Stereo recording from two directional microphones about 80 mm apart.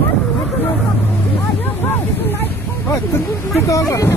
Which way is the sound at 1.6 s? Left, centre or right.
Left.